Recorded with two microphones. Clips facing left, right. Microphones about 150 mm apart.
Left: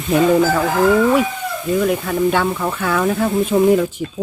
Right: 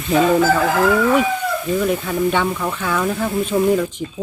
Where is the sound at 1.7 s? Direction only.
Centre (ahead or behind).